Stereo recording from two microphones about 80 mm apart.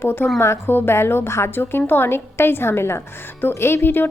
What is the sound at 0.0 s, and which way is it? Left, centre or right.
A woman's voice, left.